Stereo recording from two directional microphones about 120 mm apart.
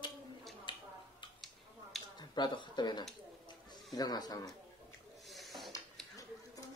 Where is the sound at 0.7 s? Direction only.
45° left (ahead or behind).